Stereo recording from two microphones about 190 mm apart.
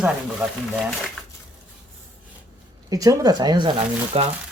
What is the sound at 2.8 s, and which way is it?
Speech, 20° right (ahead or behind).